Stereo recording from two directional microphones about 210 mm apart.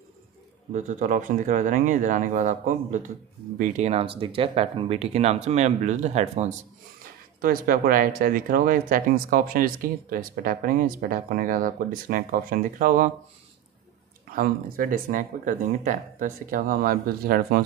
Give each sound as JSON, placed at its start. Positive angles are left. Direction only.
{"t": 0.7, "sound": "speech", "side_deg": -35}
{"t": 7.4, "sound": "speech", "side_deg": -40}
{"t": 14.3, "sound": "speech", "side_deg": -40}